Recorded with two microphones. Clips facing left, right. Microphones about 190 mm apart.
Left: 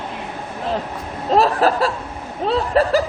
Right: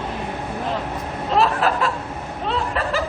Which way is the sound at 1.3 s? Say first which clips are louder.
Left 4 dB; 40° left (ahead or behind).